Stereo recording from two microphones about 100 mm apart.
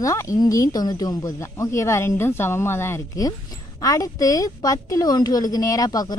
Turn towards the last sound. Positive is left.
turn(degrees=40)  # may be behind; listen again after turning